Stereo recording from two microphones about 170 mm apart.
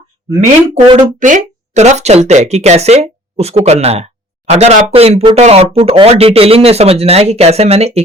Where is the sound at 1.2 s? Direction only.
45° right (ahead or behind).